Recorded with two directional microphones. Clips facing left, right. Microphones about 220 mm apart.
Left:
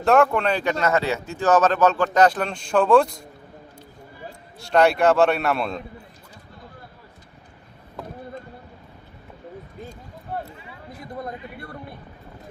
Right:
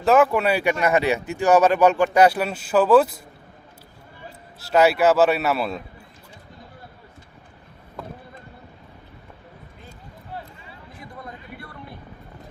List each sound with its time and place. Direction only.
0.0 s speech: 5° right (ahead or behind)
4.6 s a man's voice: 5° right (ahead or behind)
10.3 s a sound: 50° left (ahead or behind)